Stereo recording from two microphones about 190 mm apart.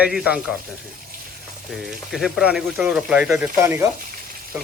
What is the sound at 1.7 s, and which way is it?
Speech, centre (ahead or behind).